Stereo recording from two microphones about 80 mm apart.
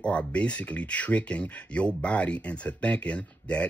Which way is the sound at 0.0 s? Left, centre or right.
Centre.